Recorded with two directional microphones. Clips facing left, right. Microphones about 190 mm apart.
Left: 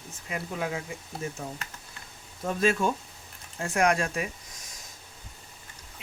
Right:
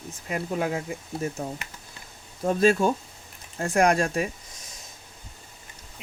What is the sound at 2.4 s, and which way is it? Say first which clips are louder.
Speech: right 5 dB; 35° right (ahead or behind).